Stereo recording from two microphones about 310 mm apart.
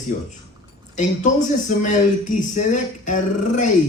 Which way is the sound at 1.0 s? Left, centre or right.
Left.